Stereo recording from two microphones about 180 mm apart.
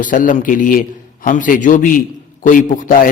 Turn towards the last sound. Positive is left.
turn(degrees=45)  # may be behind; listen again after turning